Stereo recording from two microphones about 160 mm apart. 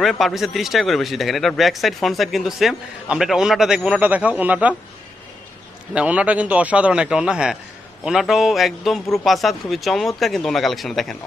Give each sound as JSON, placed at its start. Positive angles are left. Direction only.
{"t": 0.0, "sound": "a man's voice", "side_deg": 0}
{"t": 5.9, "sound": "a man's voice", "side_deg": -10}